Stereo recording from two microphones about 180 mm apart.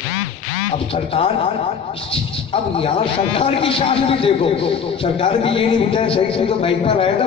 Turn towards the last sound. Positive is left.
turn(degrees=30)  # may be behind; listen again after turning